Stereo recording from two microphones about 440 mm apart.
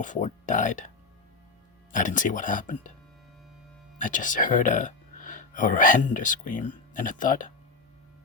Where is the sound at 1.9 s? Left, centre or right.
Centre.